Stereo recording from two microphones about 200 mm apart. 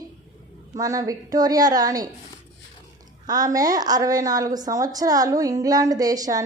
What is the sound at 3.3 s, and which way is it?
A woman's voice, 20° right (ahead or behind).